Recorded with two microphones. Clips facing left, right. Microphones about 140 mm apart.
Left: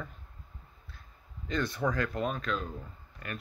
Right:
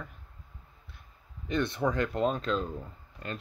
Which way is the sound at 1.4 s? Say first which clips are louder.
Right 2 dB; 20° right (ahead or behind).